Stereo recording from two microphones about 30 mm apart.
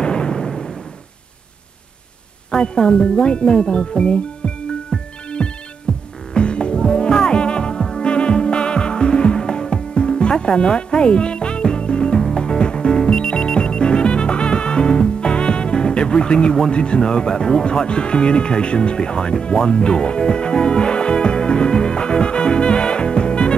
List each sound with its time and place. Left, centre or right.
0.0 s a sound: left
2.5 s speech: left
5.4 s ringtone: left
5.9 s music: left